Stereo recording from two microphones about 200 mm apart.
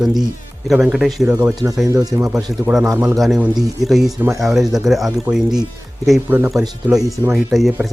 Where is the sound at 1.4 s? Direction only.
15° right (ahead or behind).